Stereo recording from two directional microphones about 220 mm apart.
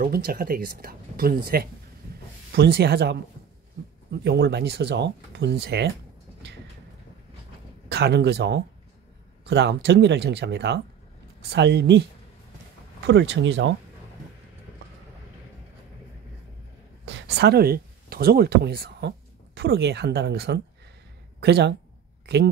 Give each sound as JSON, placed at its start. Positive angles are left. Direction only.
{"t": 0.0, "sound": "speech", "side_deg": -45}
{"t": 7.9, "sound": "speech", "side_deg": -50}
{"t": 13.0, "sound": "speech", "side_deg": -50}
{"t": 17.0, "sound": "speech", "side_deg": -55}
{"t": 22.2, "sound": "a sound", "side_deg": -45}